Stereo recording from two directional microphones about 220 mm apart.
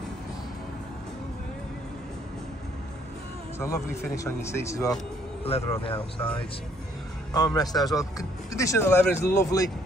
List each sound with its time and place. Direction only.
3.5 s speech: 15° left (ahead or behind)
5.4 s speech: 25° left (ahead or behind)
7.3 s speech: 15° left (ahead or behind)